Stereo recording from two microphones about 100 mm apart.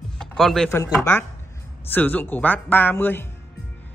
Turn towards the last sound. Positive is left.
turn(degrees=20)  # may be behind; listen again after turning